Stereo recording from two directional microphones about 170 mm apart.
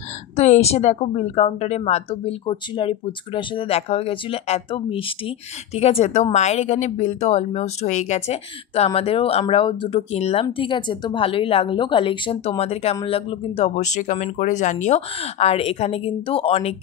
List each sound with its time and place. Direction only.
0.4 s speech: 40° left (ahead or behind)